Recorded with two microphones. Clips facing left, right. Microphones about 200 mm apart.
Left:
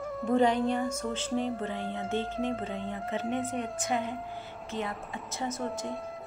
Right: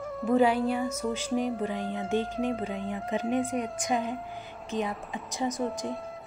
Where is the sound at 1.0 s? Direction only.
10° right (ahead or behind).